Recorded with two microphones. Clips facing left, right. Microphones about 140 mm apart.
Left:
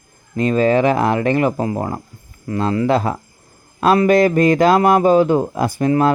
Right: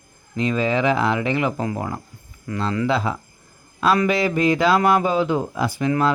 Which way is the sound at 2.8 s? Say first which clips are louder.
Left 5 dB; 50° left (ahead or behind).